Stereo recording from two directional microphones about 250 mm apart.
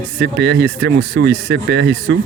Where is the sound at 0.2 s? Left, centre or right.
Right.